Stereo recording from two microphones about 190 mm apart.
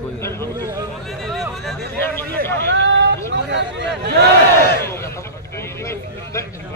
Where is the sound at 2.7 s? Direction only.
70° right (ahead or behind).